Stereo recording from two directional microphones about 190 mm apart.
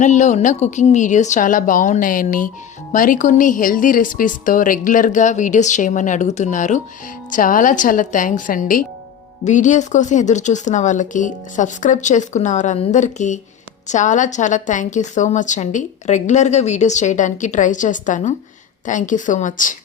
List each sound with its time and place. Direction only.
0.0 s a woman's voice: 40° left (ahead or behind)